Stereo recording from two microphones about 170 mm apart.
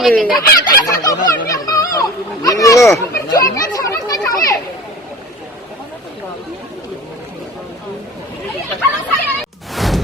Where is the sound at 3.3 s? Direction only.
20° left (ahead or behind).